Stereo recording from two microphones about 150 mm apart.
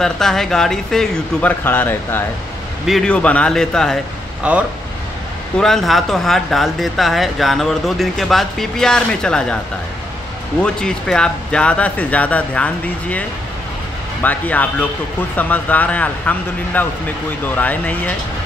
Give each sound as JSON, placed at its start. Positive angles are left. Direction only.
{"t": 0.0, "sound": "speech", "side_deg": 5}
{"t": 1.6, "sound": "speech", "side_deg": 15}
{"t": 4.4, "sound": "speech", "side_deg": -10}
{"t": 10.6, "sound": "speech", "side_deg": 5}
{"t": 14.2, "sound": "speech", "side_deg": 10}